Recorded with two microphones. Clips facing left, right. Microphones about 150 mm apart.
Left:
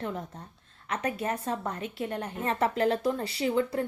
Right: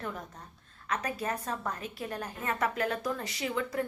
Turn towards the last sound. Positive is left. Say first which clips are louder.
# left 5 dB
turn(degrees=30)  # may be behind; listen again after turning